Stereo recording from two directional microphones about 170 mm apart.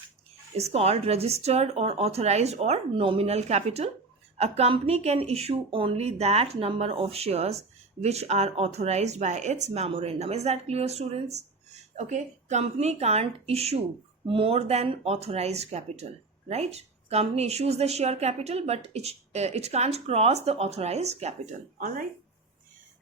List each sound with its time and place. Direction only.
0.5 s a woman's voice: 35° right (ahead or behind); by 22.0 s 50° right (ahead or behind)